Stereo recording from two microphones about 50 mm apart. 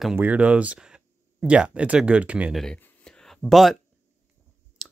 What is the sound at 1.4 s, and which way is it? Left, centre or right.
Speech, right.